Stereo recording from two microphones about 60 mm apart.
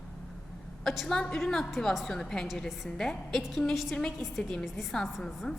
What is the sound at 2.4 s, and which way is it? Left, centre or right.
A woman's voice, centre.